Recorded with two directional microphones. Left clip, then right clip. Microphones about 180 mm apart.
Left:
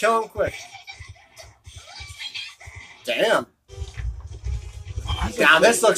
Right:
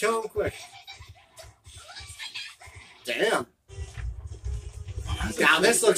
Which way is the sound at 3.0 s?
15° left (ahead or behind).